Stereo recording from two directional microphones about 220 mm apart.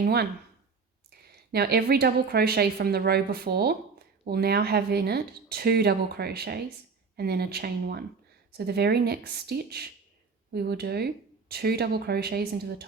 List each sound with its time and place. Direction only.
0.0 s a woman's voice: 45° right (ahead or behind)